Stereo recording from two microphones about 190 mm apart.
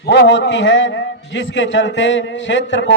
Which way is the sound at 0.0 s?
65° left (ahead or behind).